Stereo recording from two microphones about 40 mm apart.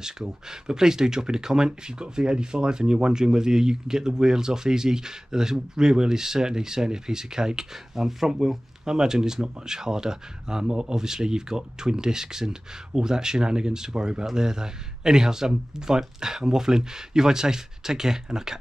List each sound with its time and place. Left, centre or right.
0.0 s speech: centre